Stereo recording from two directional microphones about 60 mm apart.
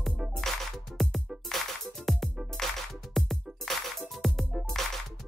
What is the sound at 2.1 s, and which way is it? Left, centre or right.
Music, centre.